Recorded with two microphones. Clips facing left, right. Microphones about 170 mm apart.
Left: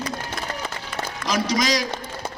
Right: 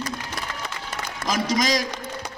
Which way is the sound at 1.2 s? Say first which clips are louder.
Even; 45° right (ahead or behind).